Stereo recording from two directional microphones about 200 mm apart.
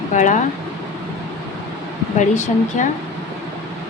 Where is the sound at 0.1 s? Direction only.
40° left (ahead or behind).